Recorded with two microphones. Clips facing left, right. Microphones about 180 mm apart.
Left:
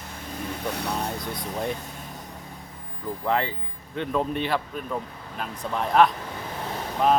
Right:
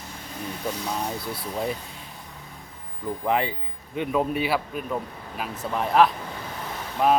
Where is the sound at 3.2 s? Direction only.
15° right (ahead or behind).